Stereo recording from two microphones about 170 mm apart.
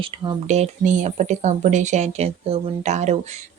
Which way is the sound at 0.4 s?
40° right (ahead or behind).